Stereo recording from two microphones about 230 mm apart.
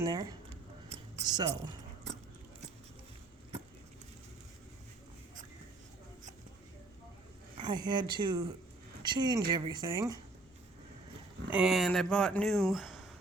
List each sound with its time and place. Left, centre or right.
0.0 s speech: centre
7.5 s speech: centre
11.5 s speech: centre